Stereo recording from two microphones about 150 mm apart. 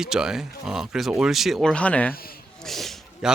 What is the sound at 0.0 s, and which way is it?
Speech, 5° right (ahead or behind).